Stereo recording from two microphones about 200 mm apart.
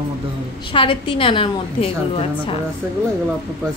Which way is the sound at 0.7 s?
25° left (ahead or behind).